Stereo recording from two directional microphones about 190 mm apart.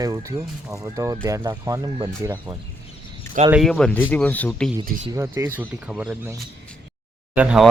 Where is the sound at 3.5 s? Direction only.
Centre (ahead or behind).